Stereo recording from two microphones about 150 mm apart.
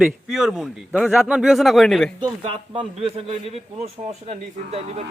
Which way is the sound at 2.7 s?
40° right (ahead or behind).